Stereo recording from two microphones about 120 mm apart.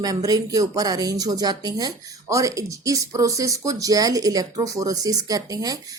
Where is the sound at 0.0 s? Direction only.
30° right (ahead or behind).